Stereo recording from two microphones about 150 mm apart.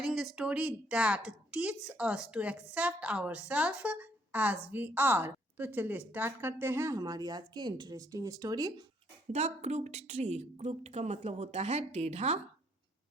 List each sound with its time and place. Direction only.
0.0 s a sound: centre (ahead or behind)
0.3 s a woman's voice: 5° right (ahead or behind); by 8.7 s 25° right (ahead or behind)
9.3 s a woman's voice: 50° right (ahead or behind)